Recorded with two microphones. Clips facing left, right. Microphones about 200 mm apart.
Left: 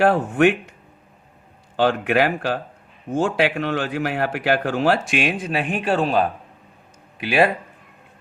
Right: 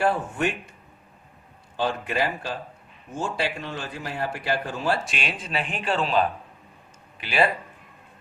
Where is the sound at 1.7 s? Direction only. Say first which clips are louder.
Left 7 dB; 75° left (ahead or behind); by 7.5 s 55° left (ahead or behind).